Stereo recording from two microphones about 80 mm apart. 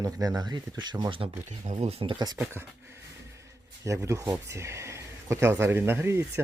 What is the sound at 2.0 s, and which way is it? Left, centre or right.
Speech, right.